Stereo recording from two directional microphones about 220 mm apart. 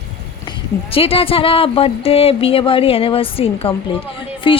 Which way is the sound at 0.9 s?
25° left (ahead or behind).